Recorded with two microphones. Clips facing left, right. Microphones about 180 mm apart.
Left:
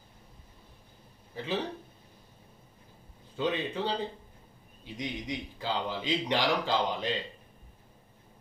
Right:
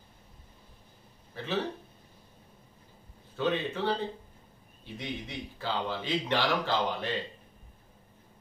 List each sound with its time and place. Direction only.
1.3 s speech: 15° left (ahead or behind)
3.3 s speech: 15° left (ahead or behind)
4.9 s speech: 15° left (ahead or behind)